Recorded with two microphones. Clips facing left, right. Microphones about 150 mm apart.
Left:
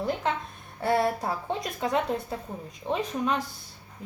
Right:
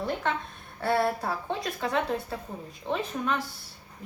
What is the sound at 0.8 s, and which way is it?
Speech, 20° left (ahead or behind).